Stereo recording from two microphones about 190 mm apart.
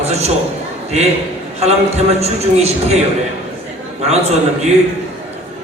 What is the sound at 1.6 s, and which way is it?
A man's voice, 35° right (ahead or behind).